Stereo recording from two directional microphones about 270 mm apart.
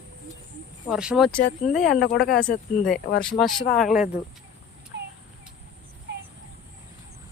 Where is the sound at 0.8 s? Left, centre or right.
Centre.